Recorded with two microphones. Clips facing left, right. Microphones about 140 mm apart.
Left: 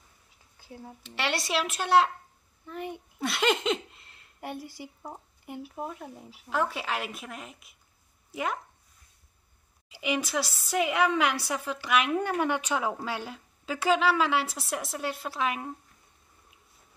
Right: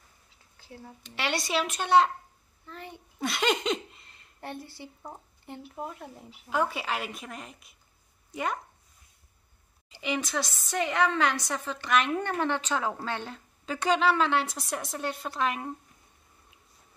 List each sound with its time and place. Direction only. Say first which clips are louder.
0.6 s speech: left 2 dB; 15° left (ahead or behind)
1.0 s a woman's voice: even; centre (ahead or behind)
2.6 s speech: left 7 dB; 15° left (ahead or behind)
3.2 s a sound: left 1 dB; centre (ahead or behind)
4.4 s a woman's voice: left 2 dB; 10° left (ahead or behind)
9.8 s a woman's voice: left 2 dB; 5° left (ahead or behind)